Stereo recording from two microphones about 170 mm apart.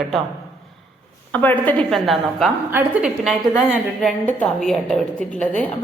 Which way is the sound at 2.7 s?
15° right (ahead or behind).